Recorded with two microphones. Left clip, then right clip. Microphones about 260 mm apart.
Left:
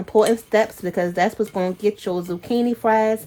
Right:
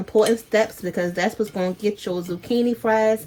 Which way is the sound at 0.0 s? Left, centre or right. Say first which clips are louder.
Left 1 dB; left.